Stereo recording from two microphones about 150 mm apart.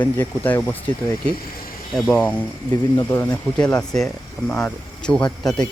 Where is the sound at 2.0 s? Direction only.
10° left (ahead or behind).